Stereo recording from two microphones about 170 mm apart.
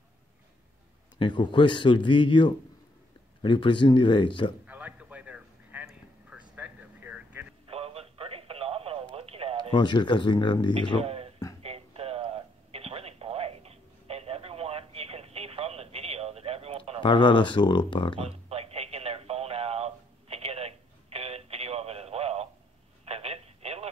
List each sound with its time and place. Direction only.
1.1 s a man's voice: 25° left (ahead or behind)
4.6 s a sound: 10° right (ahead or behind)
7.7 s a sound: 35° right (ahead or behind)
9.7 s a man's voice: 25° left (ahead or behind)
11.0 s a sound: 35° right (ahead or behind)
11.6 s telephone: 35° right (ahead or behind)
17.0 s a man's voice: 30° left (ahead or behind)
18.2 s radio: 35° right (ahead or behind)
23.0 s telephone: 35° right (ahead or behind)